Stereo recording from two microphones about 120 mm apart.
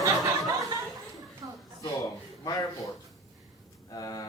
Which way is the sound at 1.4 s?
35° right (ahead or behind).